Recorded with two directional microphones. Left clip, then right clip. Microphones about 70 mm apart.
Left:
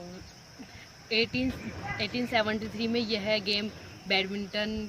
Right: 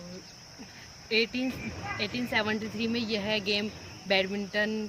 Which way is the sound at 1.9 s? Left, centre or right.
Right.